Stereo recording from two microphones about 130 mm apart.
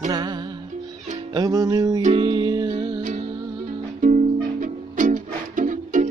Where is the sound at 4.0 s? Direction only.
80° right.